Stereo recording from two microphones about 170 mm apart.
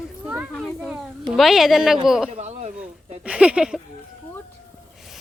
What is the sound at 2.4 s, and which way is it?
Speech, 40° right (ahead or behind).